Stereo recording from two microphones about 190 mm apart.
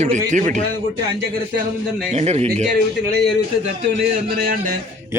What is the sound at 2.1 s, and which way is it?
Speech, 35° right (ahead or behind).